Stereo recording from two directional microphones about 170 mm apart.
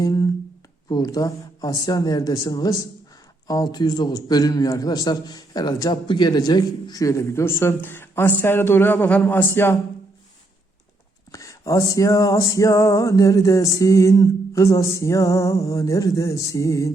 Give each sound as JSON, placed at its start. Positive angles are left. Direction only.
{"t": 0.0, "sound": "a man's voice", "side_deg": 20}
{"t": 11.3, "sound": "a man's voice", "side_deg": 20}